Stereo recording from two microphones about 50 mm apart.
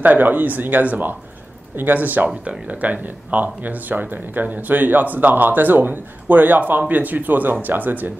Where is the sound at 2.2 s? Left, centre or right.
Right.